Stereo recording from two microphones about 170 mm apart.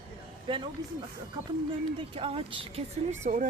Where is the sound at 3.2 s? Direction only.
50° right (ahead or behind).